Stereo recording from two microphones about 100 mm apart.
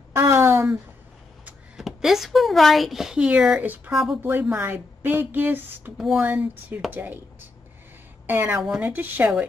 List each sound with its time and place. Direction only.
0.1 s a sound: 30° right (ahead or behind)
1.8 s speech: 5° right (ahead or behind)
3.9 s speech: 5° right (ahead or behind)
4.2 s a woman's voice: 20° right (ahead or behind)
5.9 s speech: 5° right (ahead or behind)
6.2 s a woman's voice: 15° right (ahead or behind)
8.3 s a woman's voice: 20° right (ahead or behind)